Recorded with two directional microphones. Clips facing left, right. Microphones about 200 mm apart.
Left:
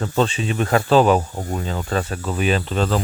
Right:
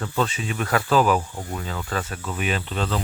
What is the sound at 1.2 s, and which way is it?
Speech, 40° left (ahead or behind).